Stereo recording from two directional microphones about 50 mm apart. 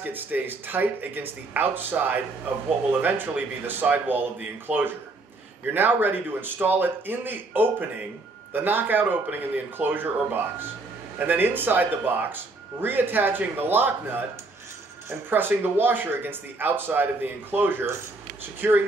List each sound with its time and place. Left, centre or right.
0.0 s speech: right
15.2 s speech: right